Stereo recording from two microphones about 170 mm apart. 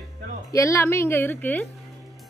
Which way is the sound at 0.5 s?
15° left (ahead or behind).